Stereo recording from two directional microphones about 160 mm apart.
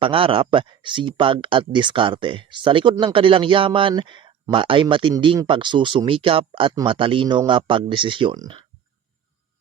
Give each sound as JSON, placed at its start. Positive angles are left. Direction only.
{"t": 0.0, "sound": "speech", "side_deg": -35}